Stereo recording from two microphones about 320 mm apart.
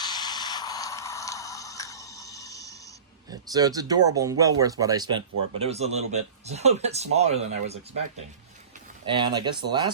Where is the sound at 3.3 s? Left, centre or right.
Centre.